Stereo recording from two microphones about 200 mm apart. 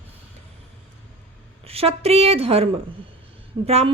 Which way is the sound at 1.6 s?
30° right (ahead or behind).